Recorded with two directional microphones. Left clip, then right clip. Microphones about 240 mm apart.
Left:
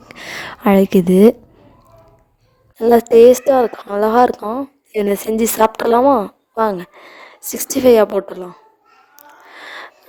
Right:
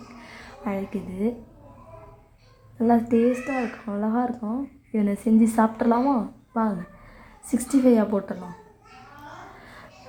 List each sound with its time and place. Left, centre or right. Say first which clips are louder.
0.2 s a sound: left 17 dB; left
3.2 s a woman's voice: left 16 dB; left
9.6 s music: left 14 dB; left